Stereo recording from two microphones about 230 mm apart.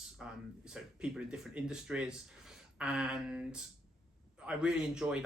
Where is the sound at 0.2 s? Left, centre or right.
Centre.